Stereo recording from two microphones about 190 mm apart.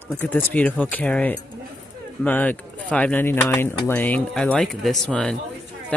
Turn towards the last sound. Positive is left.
turn(degrees=5)  # may be behind; listen again after turning